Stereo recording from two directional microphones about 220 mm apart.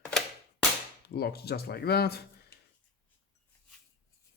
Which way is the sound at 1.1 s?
45° left (ahead or behind).